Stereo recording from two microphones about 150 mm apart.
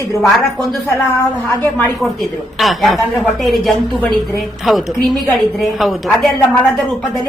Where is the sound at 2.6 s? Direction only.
Centre (ahead or behind).